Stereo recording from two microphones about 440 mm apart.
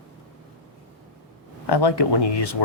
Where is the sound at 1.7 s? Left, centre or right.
Left.